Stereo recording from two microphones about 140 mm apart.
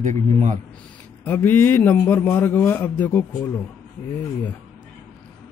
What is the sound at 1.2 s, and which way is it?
A man's voice, 15° left (ahead or behind).